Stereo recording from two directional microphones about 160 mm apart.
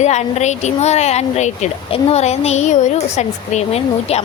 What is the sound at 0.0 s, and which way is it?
Speech, 45° left (ahead or behind).